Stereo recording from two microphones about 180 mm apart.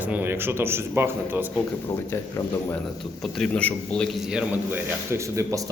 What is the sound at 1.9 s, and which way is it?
Speech, 15° left (ahead or behind).